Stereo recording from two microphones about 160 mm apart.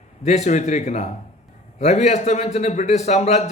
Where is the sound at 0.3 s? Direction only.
45° left (ahead or behind).